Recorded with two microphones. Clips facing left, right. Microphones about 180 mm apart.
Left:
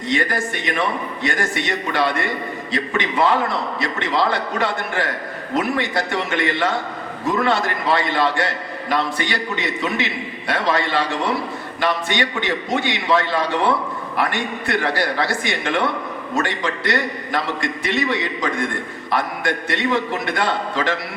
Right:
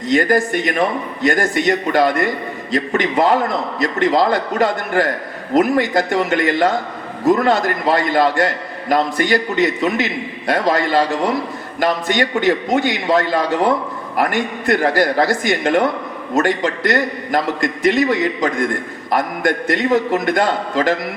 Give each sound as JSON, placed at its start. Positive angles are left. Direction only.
{"t": 0.1, "sound": "a man's voice", "side_deg": -40}